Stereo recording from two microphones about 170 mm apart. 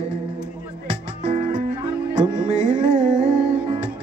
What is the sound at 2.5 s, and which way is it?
Music, 45° right (ahead or behind).